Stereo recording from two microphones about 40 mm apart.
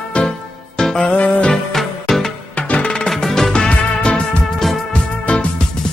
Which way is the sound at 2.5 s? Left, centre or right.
Left.